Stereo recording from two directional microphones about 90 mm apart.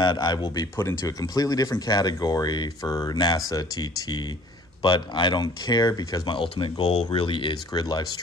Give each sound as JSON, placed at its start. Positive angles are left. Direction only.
{"t": 0.0, "sound": "speech", "side_deg": 55}
{"t": 6.3, "sound": "speech", "side_deg": 70}